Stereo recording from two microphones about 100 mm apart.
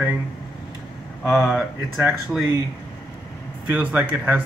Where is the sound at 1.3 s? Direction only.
5° right (ahead or behind).